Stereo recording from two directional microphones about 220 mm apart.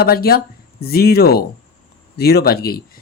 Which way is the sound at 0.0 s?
45° left (ahead or behind).